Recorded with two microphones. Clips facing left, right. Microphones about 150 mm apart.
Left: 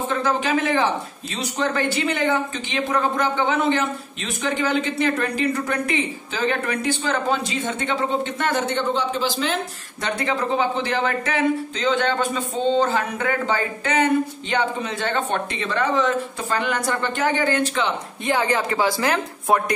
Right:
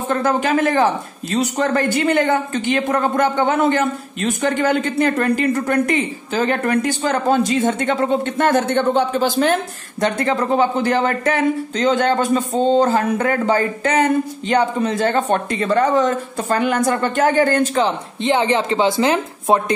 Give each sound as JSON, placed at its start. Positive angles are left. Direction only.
{"t": 0.1, "sound": "speech", "side_deg": -50}
{"t": 18.2, "sound": "speech", "side_deg": -25}